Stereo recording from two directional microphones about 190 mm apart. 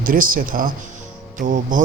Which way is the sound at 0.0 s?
45° right (ahead or behind).